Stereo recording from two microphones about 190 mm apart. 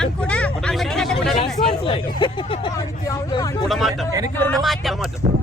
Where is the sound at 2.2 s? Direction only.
25° left (ahead or behind).